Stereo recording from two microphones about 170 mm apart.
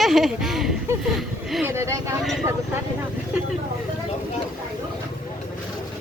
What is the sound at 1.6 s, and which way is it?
Speech, 15° right (ahead or behind).